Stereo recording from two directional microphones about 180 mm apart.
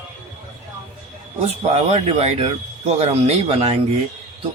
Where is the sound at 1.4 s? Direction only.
35° right (ahead or behind).